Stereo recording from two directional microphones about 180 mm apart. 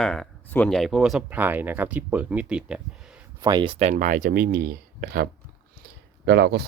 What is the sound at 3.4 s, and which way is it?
Speech, 25° right (ahead or behind).